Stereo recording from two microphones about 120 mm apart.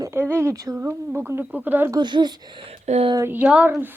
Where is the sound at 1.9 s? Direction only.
40° right (ahead or behind).